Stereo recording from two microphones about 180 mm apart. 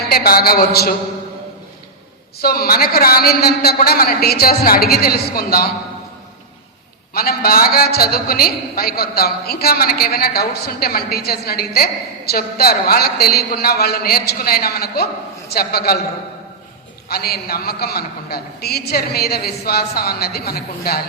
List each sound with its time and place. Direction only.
0.1 s a woman's voice: 55° left (ahead or behind)
2.4 s a woman's voice: 60° left (ahead or behind)
7.1 s a woman's voice: 60° left (ahead or behind)
17.1 s a woman's voice: 60° left (ahead or behind)